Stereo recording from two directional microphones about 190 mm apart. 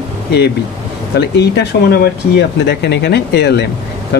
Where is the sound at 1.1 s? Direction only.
60° left (ahead or behind).